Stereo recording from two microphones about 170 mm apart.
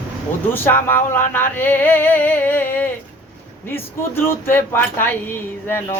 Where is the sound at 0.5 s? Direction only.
10° left (ahead or behind).